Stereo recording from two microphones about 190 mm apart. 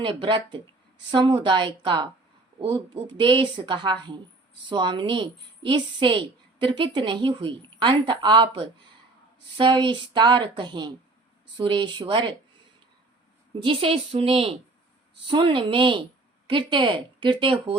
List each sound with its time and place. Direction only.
0.0 s a woman's voice: 25° right (ahead or behind)
13.6 s a woman's voice: 25° right (ahead or behind)